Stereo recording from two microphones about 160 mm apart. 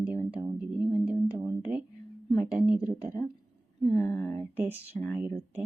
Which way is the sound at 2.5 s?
10° right (ahead or behind).